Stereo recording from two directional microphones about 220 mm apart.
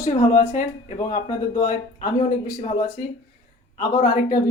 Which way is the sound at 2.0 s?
20° left (ahead or behind).